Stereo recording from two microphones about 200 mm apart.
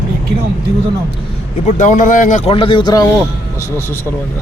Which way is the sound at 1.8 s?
40° left (ahead or behind).